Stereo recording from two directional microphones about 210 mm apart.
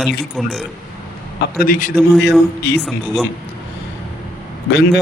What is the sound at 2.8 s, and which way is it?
Speech, 5° left (ahead or behind).